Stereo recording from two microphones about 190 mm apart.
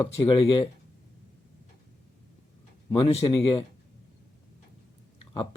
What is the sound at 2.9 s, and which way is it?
Speech, 30° left (ahead or behind).